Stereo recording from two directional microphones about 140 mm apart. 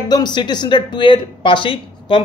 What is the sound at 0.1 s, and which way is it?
Speech, 30° left (ahead or behind).